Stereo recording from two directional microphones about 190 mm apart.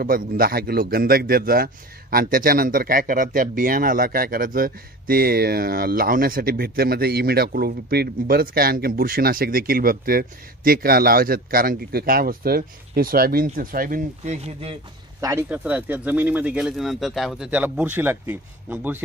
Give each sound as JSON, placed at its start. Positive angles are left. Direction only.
{"t": 0.0, "sound": "a man's voice", "side_deg": -50}
{"t": 15.1, "sound": "speech", "side_deg": -15}